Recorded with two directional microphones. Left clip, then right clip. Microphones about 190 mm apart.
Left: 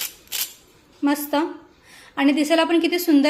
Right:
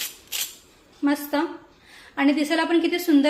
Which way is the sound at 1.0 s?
30° left (ahead or behind).